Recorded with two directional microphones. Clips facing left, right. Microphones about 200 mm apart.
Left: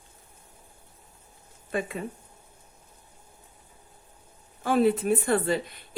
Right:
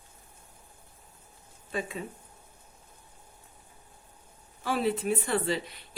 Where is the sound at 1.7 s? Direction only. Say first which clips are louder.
Left 4 dB; 55° left (ahead or behind).